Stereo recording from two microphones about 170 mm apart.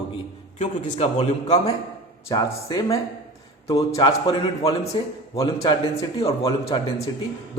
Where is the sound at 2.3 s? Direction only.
20° left (ahead or behind).